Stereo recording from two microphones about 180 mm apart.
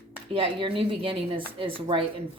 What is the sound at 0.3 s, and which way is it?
Speech, 30° right (ahead or behind).